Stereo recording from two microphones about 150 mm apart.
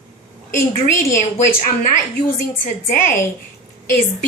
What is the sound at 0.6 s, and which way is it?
Speech, 65° left (ahead or behind).